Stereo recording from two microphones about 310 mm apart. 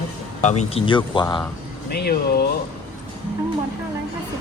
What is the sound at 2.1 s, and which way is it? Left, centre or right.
Speech, left.